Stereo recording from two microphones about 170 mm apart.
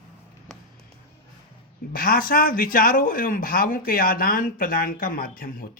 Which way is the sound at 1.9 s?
60° left (ahead or behind).